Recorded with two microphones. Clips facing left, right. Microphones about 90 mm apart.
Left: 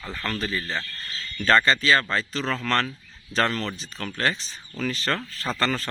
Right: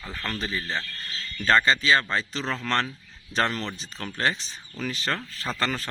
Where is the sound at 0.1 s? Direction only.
5° right (ahead or behind).